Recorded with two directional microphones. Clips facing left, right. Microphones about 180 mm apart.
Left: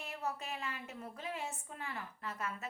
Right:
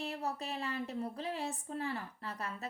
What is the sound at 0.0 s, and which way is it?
A child's voice, 35° right (ahead or behind).